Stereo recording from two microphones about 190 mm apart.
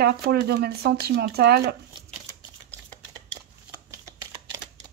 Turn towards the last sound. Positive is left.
turn(degrees=-15)  # may be behind; listen again after turning